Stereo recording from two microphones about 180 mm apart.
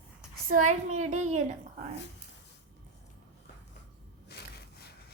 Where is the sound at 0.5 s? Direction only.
40° right (ahead or behind).